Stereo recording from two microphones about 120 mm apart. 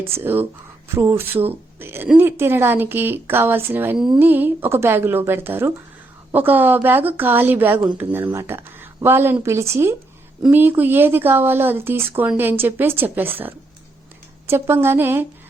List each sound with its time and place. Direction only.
0.0 s speech: 20° right (ahead or behind)